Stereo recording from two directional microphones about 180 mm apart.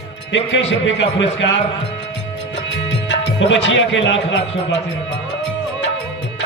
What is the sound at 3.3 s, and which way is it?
A man's voice, 90° left.